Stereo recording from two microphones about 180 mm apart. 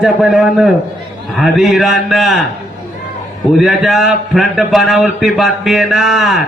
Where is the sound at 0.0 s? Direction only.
Centre (ahead or behind).